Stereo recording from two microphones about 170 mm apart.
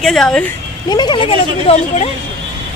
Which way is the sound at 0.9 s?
25° left (ahead or behind).